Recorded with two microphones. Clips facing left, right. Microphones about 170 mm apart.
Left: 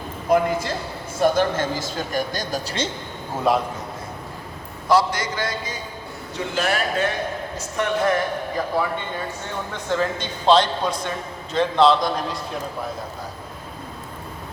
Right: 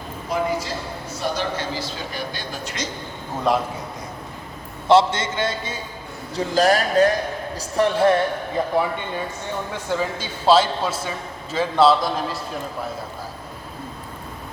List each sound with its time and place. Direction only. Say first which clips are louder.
0.3 s a sound: left 6 dB; 55° left (ahead or behind)
1.2 s a man's voice: left 7 dB; 50° left (ahead or behind); by 2.9 s 30° left (ahead or behind)
3.5 s a man's voice: left 1 dB; centre (ahead or behind)
4.9 s a man's voice: right 3 dB; 25° right (ahead or behind)
6.3 s a man's voice: right 6 dB; 35° right (ahead or behind)
9.7 s a man's voice: left 3 dB; 10° right (ahead or behind)